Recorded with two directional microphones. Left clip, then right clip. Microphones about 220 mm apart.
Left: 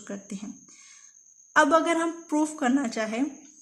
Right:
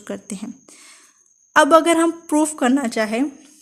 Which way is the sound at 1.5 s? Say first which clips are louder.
Right 8 dB; 45° right (ahead or behind).